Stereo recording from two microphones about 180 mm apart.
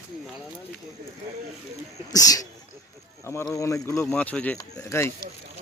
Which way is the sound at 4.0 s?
5° left (ahead or behind).